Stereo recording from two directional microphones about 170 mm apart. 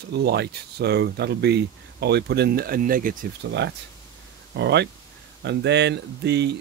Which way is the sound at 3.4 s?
80° right.